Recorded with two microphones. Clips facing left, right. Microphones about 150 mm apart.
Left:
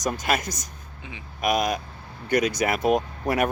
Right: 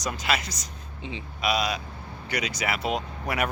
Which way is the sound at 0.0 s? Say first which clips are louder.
Left 3 dB; 45° left (ahead or behind).